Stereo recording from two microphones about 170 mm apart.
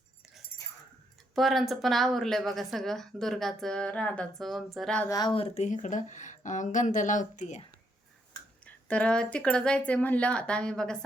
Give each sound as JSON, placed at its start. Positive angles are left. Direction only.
{"t": 1.4, "sound": "speech", "side_deg": 0}
{"t": 5.0, "sound": "speech", "side_deg": 25}
{"t": 8.6, "sound": "speech", "side_deg": 5}